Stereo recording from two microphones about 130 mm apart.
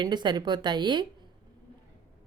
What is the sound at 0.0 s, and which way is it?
A woman's voice, 35° right (ahead or behind).